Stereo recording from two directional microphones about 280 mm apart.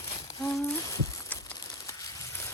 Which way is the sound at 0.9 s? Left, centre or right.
Centre.